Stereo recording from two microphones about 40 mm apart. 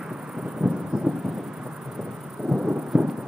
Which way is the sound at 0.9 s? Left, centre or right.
Centre.